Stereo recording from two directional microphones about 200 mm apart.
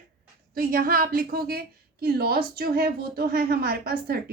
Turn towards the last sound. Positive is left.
turn(degrees=-50)  # may be behind; listen again after turning